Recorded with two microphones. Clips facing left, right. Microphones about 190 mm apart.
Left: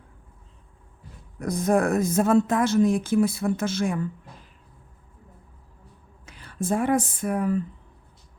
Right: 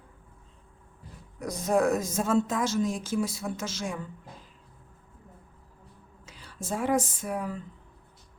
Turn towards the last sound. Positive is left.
turn(degrees=55)  # may be behind; listen again after turning